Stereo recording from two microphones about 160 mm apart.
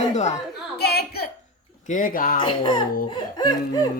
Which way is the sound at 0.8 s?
90° left.